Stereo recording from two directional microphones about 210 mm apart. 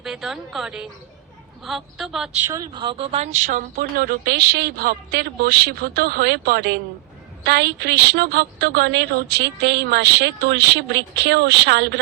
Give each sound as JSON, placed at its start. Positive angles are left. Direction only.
{"t": 0.0, "sound": "a woman's voice", "side_deg": 0}
{"t": 2.5, "sound": "a woman's voice", "side_deg": -20}